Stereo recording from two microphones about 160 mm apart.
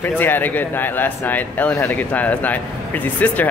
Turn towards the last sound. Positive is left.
turn(degrees=10)  # may be behind; listen again after turning